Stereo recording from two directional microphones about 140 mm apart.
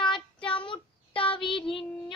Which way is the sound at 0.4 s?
35° left (ahead or behind).